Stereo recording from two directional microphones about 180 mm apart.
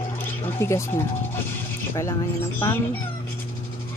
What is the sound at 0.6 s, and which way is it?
Speech, 15° left (ahead or behind).